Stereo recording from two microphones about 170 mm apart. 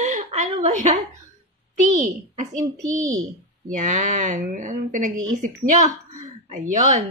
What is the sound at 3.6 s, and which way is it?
A woman's voice, 50° right (ahead or behind).